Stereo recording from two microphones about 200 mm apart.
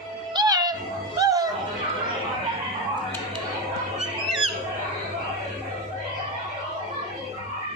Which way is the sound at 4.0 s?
Centre (ahead or behind).